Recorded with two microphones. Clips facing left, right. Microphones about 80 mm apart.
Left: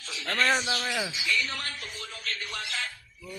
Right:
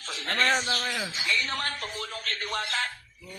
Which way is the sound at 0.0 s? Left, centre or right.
Right.